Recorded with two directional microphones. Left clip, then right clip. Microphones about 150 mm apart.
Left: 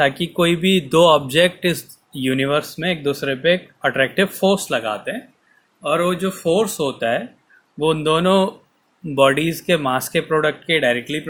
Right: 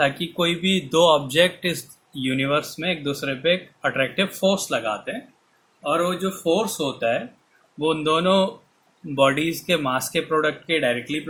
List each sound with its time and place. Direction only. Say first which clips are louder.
0.0 s speech: left 4 dB; 45° left (ahead or behind)